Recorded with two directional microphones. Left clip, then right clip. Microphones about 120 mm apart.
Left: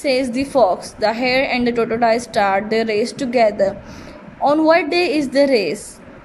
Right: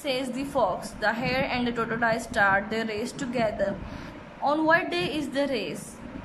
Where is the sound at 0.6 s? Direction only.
30° left (ahead or behind).